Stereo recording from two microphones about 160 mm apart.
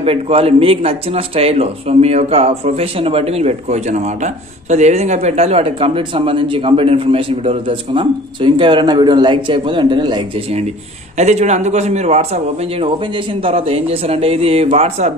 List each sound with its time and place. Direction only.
0.0 s speech: 35° right (ahead or behind)
11.1 s speech: 45° right (ahead or behind)